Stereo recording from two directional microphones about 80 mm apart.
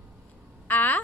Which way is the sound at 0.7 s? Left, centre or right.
Left.